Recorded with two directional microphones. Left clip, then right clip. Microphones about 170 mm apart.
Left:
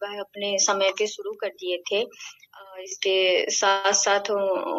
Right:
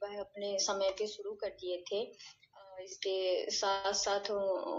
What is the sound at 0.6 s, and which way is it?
Speech, 60° left (ahead or behind).